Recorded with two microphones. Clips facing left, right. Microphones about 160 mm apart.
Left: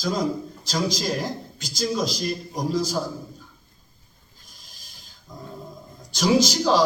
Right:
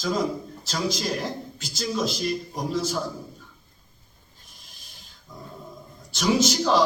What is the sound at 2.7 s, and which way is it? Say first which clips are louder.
Speech: left 1 dB; 35° left (ahead or behind).